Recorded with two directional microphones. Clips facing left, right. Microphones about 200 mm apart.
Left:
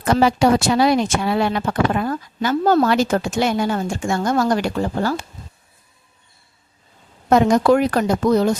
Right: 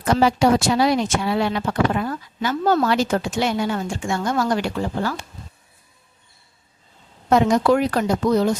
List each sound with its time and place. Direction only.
0.0 s speech: 60° left (ahead or behind)
7.3 s speech: 45° left (ahead or behind)